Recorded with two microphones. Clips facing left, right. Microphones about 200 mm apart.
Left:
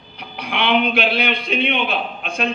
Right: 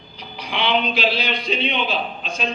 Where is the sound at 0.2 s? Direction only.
60° left (ahead or behind).